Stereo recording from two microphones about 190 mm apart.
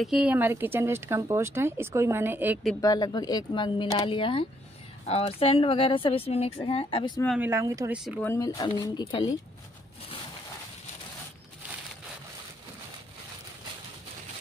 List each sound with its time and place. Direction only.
0.0 s speech: 5° right (ahead or behind)
2.8 s a woman's voice: 20° left (ahead or behind)
7.3 s speech: 10° right (ahead or behind)
7.9 s speech: 5° right (ahead or behind)
8.2 s a woman's voice: 15° left (ahead or behind)